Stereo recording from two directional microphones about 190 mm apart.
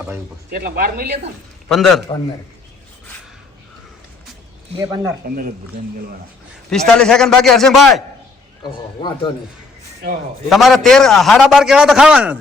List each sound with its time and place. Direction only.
0.5 s speech: 50° right (ahead or behind)
1.7 s a man's voice: centre (ahead or behind)
4.8 s speech: 15° right (ahead or behind)
5.2 s speech: 50° right (ahead or behind)
6.7 s a man's voice: 5° left (ahead or behind)
9.0 s a man's voice: 25° left (ahead or behind)
10.5 s a man's voice: centre (ahead or behind)